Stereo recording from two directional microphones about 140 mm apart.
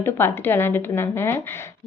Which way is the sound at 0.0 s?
15° left (ahead or behind).